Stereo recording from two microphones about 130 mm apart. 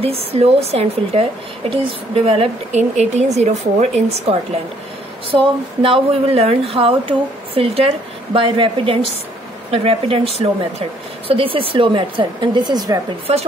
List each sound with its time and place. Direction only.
0.0 s a woman's voice: 50° right (ahead or behind)
5.3 s a woman's voice: 40° right (ahead or behind)